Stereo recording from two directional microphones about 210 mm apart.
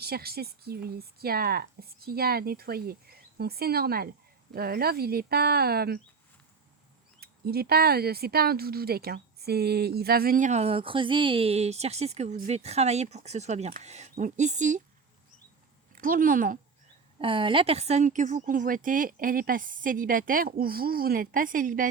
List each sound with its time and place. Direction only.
0.0 s speech: 45° right (ahead or behind)
7.2 s speech: 45° right (ahead or behind)
16.0 s speech: 40° right (ahead or behind)
17.2 s speech: 25° right (ahead or behind); by 21.8 s 40° right (ahead or behind)